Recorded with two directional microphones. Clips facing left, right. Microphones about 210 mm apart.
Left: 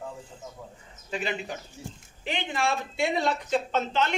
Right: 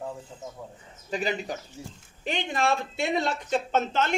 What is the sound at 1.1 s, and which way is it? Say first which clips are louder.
Speech: right 2 dB; 40° right (ahead or behind).